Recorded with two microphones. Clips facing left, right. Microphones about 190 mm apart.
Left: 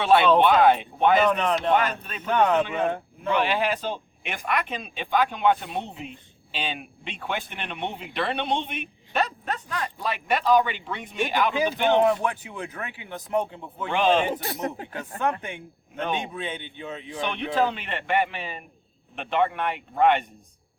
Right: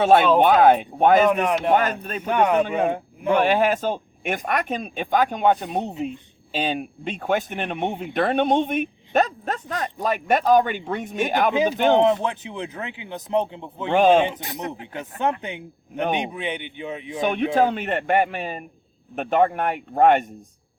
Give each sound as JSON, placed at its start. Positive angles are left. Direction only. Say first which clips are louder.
{"t": 0.0, "sound": "speech", "louder": "right 3 dB", "side_deg": -45}
{"t": 1.3, "sound": "speech", "louder": "right 3 dB", "side_deg": -10}
{"t": 1.7, "sound": "speech", "louder": "right 3 dB", "side_deg": -45}
{"t": 2.2, "sound": "speech", "louder": "right 2 dB", "side_deg": -15}
{"t": 3.2, "sound": "speech", "louder": "right 5 dB", "side_deg": -45}
{"t": 11.9, "sound": "speech", "louder": "right 2 dB", "side_deg": -20}
{"t": 13.9, "sound": "speech", "louder": "right 6 dB", "side_deg": -45}
{"t": 14.3, "sound": "speech", "louder": "left 1 dB", "side_deg": -15}
{"t": 17.2, "sound": "speech", "louder": "right 5 dB", "side_deg": -45}